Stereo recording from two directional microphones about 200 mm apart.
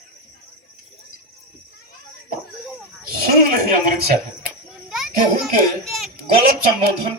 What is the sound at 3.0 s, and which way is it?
Speech, 50° right (ahead or behind).